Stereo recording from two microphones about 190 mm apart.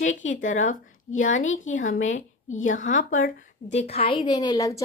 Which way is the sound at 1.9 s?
40° left (ahead or behind).